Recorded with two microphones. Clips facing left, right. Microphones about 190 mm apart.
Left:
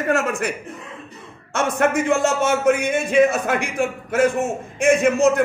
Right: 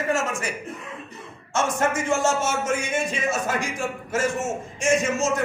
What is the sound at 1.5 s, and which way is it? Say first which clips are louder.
A man's voice: left 4 dB; 60° left (ahead or behind).